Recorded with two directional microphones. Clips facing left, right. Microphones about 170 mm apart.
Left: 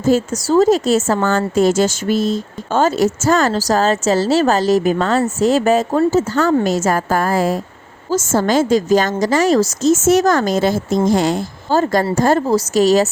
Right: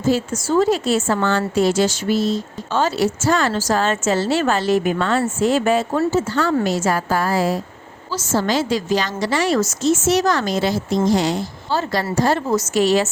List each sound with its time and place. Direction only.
0.0 s a woman's voice: 45° left (ahead or behind)